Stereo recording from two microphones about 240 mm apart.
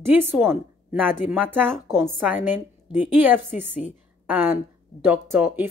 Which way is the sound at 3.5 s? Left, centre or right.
Left.